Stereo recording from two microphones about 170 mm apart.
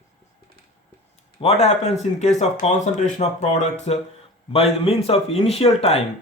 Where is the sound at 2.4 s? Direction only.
45° left (ahead or behind).